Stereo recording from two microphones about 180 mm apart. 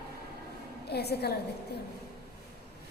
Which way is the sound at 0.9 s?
65° left (ahead or behind).